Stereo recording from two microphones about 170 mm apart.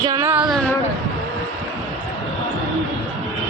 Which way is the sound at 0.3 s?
10° right (ahead or behind).